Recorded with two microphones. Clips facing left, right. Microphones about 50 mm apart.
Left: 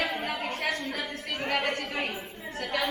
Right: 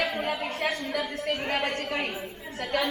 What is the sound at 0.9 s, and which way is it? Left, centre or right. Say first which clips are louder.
Speech: right 5 dB; right.